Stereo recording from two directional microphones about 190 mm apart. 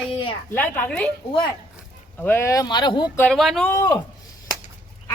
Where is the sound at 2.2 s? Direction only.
10° left (ahead or behind).